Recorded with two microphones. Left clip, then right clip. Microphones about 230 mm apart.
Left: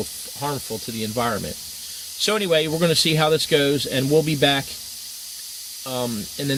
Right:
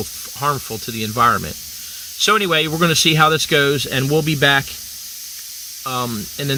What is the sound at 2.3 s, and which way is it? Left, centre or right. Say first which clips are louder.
Speech: right 4 dB; right.